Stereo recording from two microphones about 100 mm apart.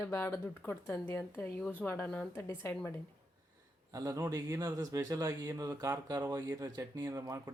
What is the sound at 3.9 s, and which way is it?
Speech, 35° right (ahead or behind).